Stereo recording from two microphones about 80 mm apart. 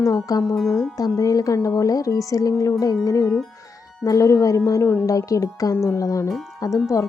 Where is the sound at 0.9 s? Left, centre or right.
Left.